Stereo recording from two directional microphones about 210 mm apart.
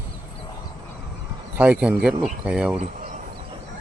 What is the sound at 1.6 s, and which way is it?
Speech, 5° right (ahead or behind).